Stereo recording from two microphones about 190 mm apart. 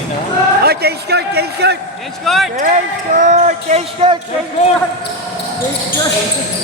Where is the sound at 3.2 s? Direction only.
40° right (ahead or behind).